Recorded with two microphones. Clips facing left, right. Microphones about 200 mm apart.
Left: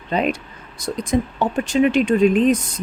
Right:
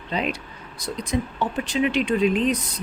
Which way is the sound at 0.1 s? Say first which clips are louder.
Left 6 dB; 50° left (ahead or behind).